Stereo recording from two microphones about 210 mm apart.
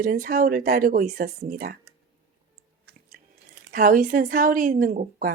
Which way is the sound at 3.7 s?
40° right (ahead or behind).